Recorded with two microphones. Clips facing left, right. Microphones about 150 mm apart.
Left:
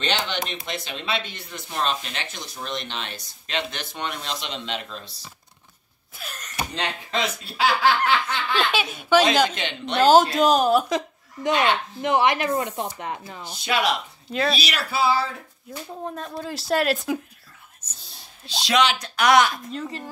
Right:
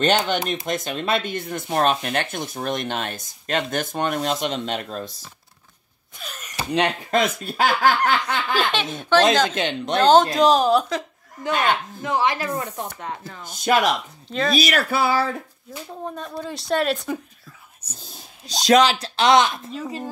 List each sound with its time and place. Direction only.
0.0 s speech: 45° right (ahead or behind)
6.1 s speech: centre (ahead or behind)
6.7 s speech: 55° right (ahead or behind)
8.5 s speech: 5° left (ahead or behind)
9.6 s speech: 45° right (ahead or behind)
9.9 s speech: 5° left (ahead or behind)
10.9 s a woman's voice: 20° left (ahead or behind)
13.6 s speech: 45° right (ahead or behind)
14.3 s speech: 5° left (ahead or behind)
14.6 s speech: 50° right (ahead or behind)
15.7 s speech: centre (ahead or behind)
17.8 s speech: 10° right (ahead or behind)
18.5 s speech: 40° right (ahead or behind); by 19.6 s 20° right (ahead or behind)